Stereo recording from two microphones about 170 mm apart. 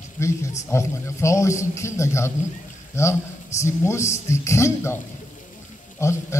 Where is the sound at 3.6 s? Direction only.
15° left (ahead or behind).